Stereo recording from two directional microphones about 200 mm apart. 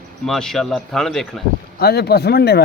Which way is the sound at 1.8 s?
55° left (ahead or behind).